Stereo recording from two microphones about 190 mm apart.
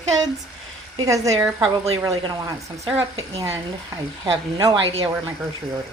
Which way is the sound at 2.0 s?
15° right (ahead or behind).